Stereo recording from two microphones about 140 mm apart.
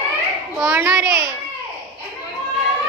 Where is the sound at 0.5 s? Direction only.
20° right (ahead or behind).